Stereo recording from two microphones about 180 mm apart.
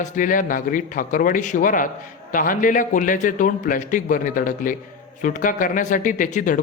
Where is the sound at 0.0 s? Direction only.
45° left (ahead or behind).